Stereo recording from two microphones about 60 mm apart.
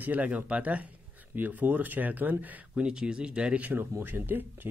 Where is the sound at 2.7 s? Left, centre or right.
Centre.